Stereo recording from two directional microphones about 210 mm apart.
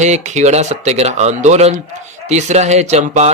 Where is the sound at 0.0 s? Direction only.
35° right (ahead or behind).